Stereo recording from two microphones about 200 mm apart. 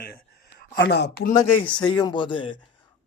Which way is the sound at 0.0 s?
50° left (ahead or behind).